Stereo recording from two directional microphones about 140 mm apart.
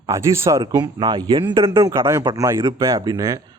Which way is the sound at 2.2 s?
35° right (ahead or behind).